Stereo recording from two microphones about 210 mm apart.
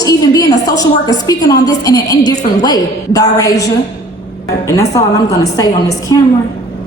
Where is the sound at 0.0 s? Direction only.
15° left (ahead or behind).